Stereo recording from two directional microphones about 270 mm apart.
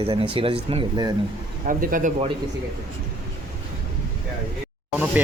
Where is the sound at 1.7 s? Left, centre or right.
Right.